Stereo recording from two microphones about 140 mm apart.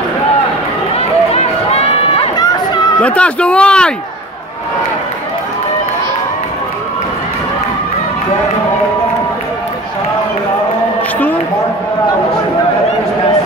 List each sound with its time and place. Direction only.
0.9 s run: 45° left (ahead or behind)
2.3 s run: 30° left (ahead or behind)
3.0 s speech: 10° left (ahead or behind)